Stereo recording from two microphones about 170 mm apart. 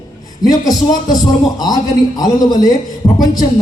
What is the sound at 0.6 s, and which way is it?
Speech, 20° left (ahead or behind).